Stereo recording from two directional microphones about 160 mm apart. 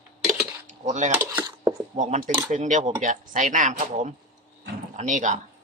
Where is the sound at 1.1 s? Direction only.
20° right (ahead or behind).